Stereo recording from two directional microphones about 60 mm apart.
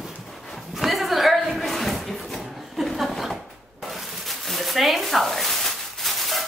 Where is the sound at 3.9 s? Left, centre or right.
Centre.